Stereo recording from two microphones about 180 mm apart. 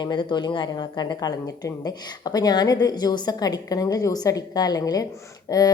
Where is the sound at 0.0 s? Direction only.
25° left (ahead or behind).